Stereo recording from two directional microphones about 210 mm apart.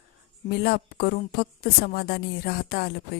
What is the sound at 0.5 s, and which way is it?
A woman's voice, 45° left (ahead or behind).